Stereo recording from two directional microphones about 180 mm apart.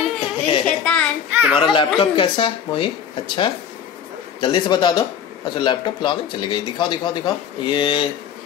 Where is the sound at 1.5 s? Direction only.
30° left (ahead or behind).